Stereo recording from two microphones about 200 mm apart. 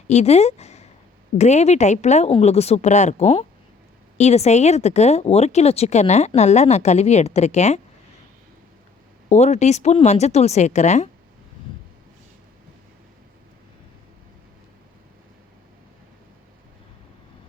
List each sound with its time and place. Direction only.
0.1 s speech: 35° left (ahead or behind)
9.3 s speech: 35° left (ahead or behind)